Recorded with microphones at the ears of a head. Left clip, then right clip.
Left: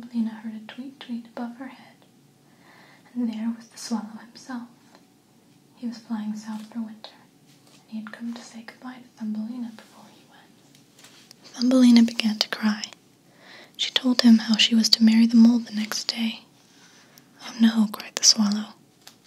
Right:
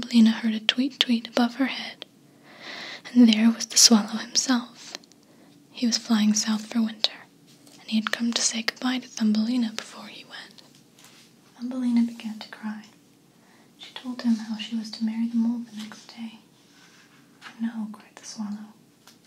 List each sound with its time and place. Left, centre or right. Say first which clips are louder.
0.0 s speech: right 10 dB; right
11.5 s speech: left 9 dB; left
17.5 s speech: left 11 dB; left